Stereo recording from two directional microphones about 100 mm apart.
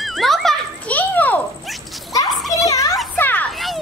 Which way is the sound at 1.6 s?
Centre (ahead or behind).